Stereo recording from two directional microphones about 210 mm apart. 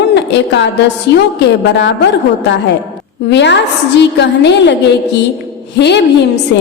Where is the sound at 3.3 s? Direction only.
55° left (ahead or behind).